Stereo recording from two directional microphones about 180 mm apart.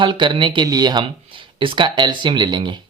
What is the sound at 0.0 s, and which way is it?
Speech, 25° right (ahead or behind).